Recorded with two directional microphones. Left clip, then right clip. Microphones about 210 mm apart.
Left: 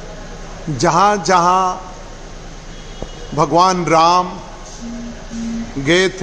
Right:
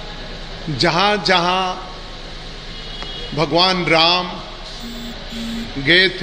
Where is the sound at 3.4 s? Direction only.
15° left (ahead or behind).